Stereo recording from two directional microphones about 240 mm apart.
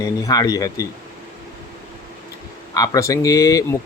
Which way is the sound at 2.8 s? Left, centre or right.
Centre.